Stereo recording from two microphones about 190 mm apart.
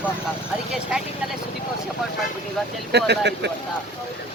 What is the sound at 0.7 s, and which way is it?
Speech, 5° right (ahead or behind).